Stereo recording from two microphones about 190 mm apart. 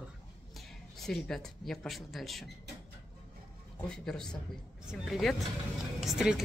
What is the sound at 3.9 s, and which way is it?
Speech, 5° left (ahead or behind).